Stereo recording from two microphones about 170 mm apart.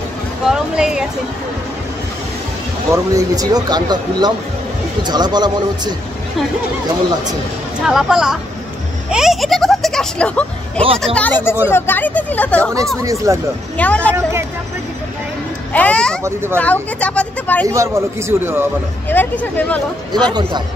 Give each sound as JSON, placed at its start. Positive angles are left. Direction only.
{"t": 0.5, "sound": "speech", "side_deg": -5}
{"t": 2.9, "sound": "speech", "side_deg": -20}
{"t": 7.8, "sound": "speech", "side_deg": -5}
{"t": 13.0, "sound": "speech", "side_deg": -20}
{"t": 13.7, "sound": "speech", "side_deg": 10}
{"t": 15.7, "sound": "speech", "side_deg": 10}
{"t": 17.6, "sound": "a man's voice", "side_deg": -15}
{"t": 19.0, "sound": "speech", "side_deg": 10}
{"t": 20.1, "sound": "speech", "side_deg": -25}